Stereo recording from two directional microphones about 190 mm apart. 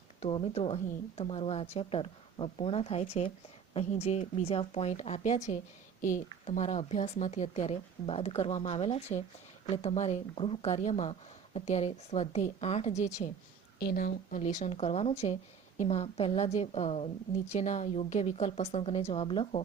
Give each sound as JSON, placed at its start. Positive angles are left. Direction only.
{"t": 0.2, "sound": "a woman's voice", "side_deg": 30}
{"t": 13.7, "sound": "a woman's voice", "side_deg": 50}